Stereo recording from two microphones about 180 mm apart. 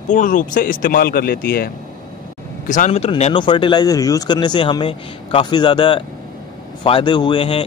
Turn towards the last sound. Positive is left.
turn(degrees=30)  # may be behind; listen again after turning